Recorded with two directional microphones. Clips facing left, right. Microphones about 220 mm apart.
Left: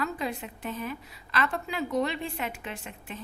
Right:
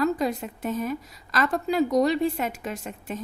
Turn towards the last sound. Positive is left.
turn(degrees=-45)  # may be behind; listen again after turning